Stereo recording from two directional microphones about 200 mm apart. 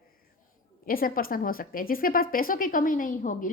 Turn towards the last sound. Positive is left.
turn(degrees=40)  # may be behind; listen again after turning